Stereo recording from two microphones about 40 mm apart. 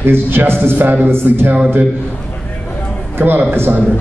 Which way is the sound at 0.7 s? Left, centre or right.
Right.